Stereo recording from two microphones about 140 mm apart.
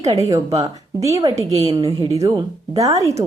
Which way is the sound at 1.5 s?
50° right (ahead or behind).